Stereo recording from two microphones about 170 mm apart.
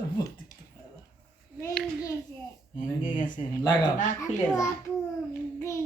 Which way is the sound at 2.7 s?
50° left (ahead or behind).